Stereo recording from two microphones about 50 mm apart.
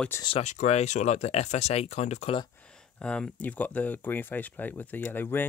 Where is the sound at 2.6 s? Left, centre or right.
Left.